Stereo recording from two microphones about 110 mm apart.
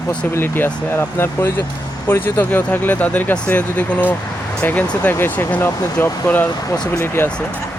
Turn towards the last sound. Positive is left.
turn(degrees=10)  # may be behind; listen again after turning